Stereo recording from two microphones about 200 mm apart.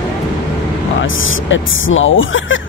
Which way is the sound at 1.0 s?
75° left (ahead or behind).